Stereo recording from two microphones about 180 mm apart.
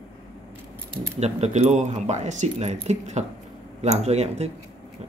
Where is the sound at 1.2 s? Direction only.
40° right (ahead or behind).